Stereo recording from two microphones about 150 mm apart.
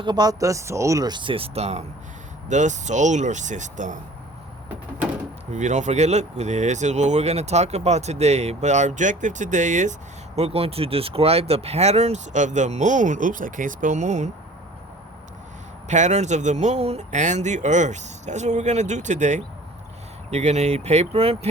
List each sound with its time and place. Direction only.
0.0 s speech: 30° right (ahead or behind); by 3.9 s 55° right (ahead or behind)
5.5 s speech: 55° right (ahead or behind)
10.3 s speech: 40° right (ahead or behind)
15.9 s speech: 50° right (ahead or behind)